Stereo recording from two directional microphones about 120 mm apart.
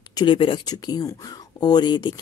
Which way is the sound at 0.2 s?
45° left (ahead or behind).